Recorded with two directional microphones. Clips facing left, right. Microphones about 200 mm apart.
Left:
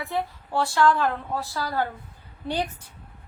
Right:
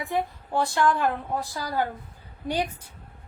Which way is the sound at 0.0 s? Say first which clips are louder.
Right 1 dB; 15° right (ahead or behind).